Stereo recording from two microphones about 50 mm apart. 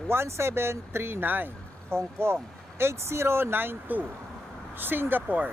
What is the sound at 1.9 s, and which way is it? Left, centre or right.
Speech, right.